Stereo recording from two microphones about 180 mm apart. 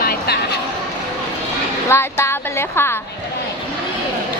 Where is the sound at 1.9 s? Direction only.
15° left (ahead or behind).